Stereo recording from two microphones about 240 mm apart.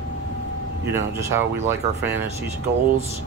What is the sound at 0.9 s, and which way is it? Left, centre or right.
Speech, centre.